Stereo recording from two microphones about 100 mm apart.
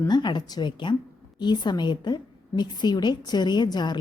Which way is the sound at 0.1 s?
45° left (ahead or behind).